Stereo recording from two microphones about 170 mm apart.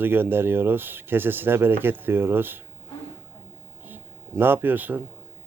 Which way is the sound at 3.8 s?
10° right (ahead or behind).